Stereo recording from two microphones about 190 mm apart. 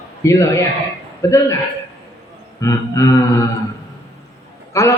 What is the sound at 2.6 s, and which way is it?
Speech, 15° left (ahead or behind).